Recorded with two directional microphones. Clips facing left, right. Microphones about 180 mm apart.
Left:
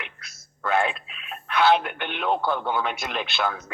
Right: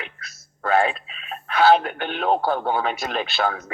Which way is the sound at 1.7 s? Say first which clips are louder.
Right 4 dB; 40° right (ahead or behind).